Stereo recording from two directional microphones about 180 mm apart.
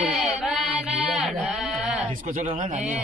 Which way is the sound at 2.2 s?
50° right (ahead or behind).